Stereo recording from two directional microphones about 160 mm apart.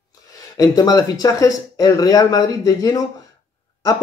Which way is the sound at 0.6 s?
25° left (ahead or behind).